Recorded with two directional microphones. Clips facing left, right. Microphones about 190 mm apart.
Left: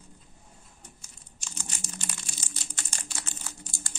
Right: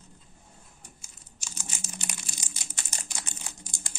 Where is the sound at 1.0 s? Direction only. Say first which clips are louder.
Left 1 dB; 10° right (ahead or behind).